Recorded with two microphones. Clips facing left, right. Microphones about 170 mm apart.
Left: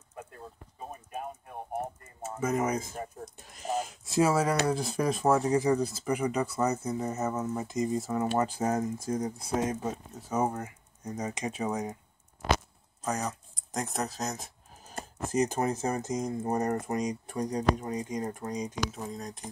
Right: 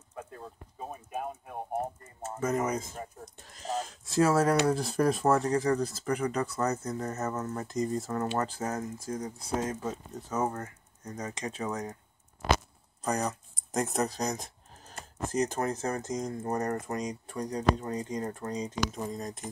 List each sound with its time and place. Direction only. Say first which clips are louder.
2.2 s speech: left 1 dB; 5° left (ahead or behind)
3.5 s a sound: left 2 dB; 15° left (ahead or behind)
4.6 s speech: right 2 dB; centre (ahead or behind)
13.0 s speech: right 2 dB; centre (ahead or behind)
18.9 s speech: right 2 dB; centre (ahead or behind)